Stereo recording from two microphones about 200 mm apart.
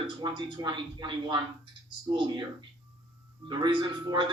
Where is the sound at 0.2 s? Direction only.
20° right (ahead or behind).